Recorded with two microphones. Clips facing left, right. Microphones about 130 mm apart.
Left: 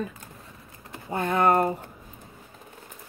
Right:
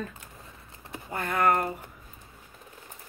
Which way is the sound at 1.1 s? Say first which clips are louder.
Left 3 dB; 25° left (ahead or behind).